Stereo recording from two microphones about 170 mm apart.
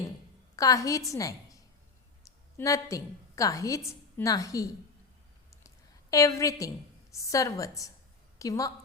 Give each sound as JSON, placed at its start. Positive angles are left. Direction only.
{"t": 0.5, "sound": "a woman's voice", "side_deg": 20}
{"t": 5.6, "sound": "a sound", "side_deg": 20}
{"t": 7.1, "sound": "a woman's voice", "side_deg": 20}